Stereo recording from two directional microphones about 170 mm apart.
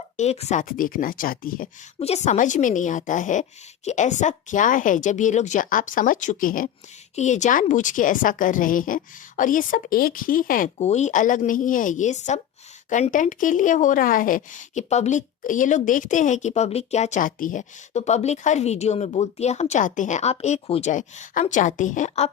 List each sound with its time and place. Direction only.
0.2 s speech: 40° left (ahead or behind); by 1.7 s 55° left (ahead or behind)
2.0 s speech: 40° left (ahead or behind); by 10.7 s 55° left (ahead or behind)
10.8 s speech: 40° left (ahead or behind)